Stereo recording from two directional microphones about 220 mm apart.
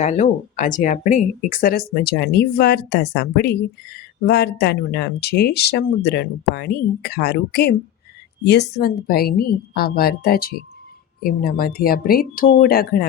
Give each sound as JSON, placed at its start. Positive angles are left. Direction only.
{"t": 0.0, "sound": "speech", "side_deg": 35}